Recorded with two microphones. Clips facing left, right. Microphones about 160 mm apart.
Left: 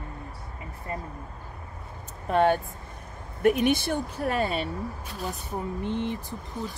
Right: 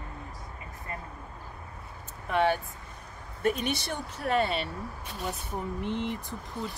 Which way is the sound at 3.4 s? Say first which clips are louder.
Left 7 dB; 55° left (ahead or behind).